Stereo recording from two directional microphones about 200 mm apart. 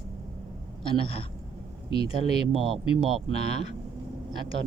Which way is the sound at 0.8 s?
30° left (ahead or behind).